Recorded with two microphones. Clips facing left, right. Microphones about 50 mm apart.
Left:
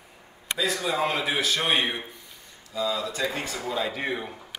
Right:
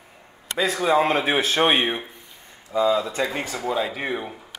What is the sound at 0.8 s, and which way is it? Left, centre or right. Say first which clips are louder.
A man's voice: right 7 dB; right.